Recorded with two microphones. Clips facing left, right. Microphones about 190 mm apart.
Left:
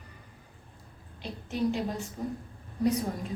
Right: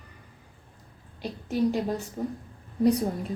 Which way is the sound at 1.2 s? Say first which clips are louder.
Right 4 dB; 40° right (ahead or behind).